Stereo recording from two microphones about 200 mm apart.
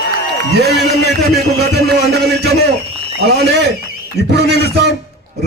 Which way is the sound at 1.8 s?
55° right (ahead or behind).